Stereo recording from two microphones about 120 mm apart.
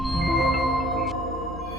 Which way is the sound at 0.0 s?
Centre (ahead or behind).